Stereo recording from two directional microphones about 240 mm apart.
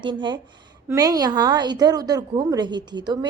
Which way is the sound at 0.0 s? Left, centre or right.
Centre.